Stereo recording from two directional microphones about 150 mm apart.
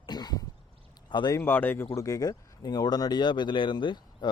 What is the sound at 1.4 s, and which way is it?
Speech, 15° left (ahead or behind).